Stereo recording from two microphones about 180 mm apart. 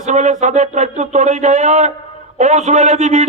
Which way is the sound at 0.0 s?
40° right (ahead or behind).